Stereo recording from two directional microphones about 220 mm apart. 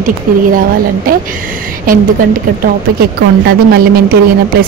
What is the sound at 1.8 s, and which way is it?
Speech, 40° right (ahead or behind).